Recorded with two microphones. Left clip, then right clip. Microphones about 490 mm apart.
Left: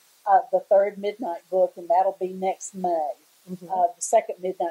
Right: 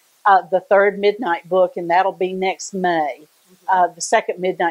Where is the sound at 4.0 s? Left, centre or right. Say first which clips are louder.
Right 4 dB; right.